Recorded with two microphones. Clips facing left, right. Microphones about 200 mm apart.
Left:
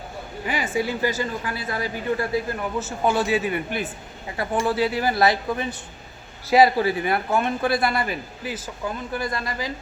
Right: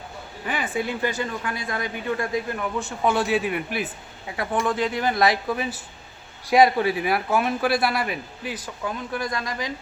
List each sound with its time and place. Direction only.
0.4 s speech: 10° left (ahead or behind)